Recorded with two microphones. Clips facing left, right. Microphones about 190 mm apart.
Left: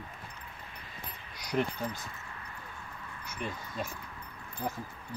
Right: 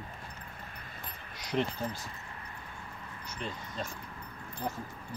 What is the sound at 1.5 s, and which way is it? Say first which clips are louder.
Speech: left 1 dB; 5° left (ahead or behind).